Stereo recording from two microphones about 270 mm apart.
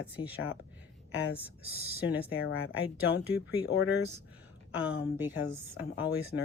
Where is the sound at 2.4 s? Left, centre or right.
Left.